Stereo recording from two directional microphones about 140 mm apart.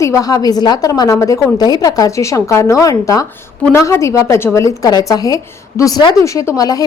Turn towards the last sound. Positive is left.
turn(degrees=25)  # may be behind; listen again after turning